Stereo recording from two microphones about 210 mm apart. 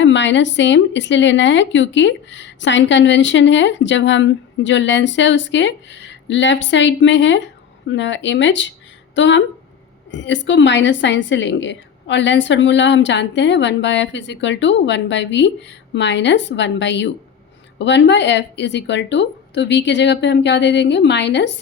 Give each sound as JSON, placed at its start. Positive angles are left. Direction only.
{"t": 0.0, "sound": "speech", "side_deg": 60}